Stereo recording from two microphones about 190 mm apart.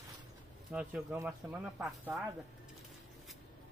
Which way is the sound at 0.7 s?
5° right (ahead or behind).